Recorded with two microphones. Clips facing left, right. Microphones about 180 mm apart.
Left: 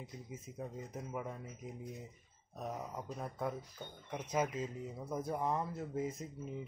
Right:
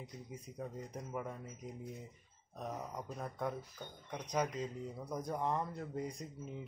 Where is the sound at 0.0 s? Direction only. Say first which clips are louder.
Even; 5° left (ahead or behind).